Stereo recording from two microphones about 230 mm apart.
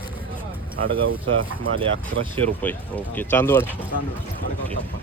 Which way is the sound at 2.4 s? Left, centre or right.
Centre.